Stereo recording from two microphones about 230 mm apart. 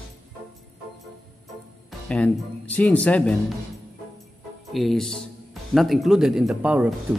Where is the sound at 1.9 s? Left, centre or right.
Centre.